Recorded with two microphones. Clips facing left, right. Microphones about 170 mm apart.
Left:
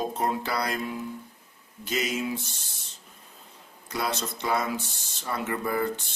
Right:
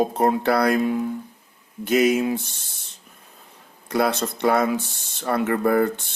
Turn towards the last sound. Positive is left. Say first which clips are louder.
# right 8 dB
turn(degrees=-60)  # may be behind; listen again after turning